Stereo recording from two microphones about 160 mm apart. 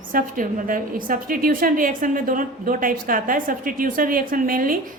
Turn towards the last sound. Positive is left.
turn(degrees=-60)  # may be behind; listen again after turning